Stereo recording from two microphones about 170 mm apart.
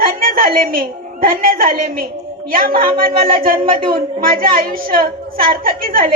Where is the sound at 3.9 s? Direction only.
60° right (ahead or behind).